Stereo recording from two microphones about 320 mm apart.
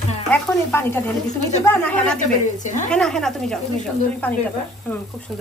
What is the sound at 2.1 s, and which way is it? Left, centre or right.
Speech, left.